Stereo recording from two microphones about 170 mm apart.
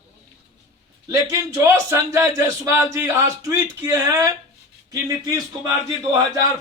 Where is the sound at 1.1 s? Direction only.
15° right (ahead or behind).